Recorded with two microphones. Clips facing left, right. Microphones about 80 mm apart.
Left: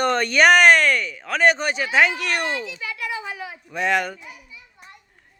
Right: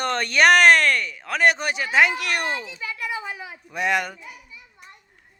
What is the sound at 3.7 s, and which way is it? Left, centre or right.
Speech, centre.